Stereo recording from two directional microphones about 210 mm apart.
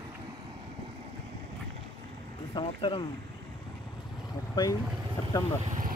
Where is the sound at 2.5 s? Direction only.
25° left (ahead or behind).